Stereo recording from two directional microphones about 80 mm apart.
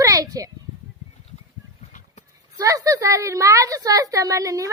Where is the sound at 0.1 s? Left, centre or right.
Right.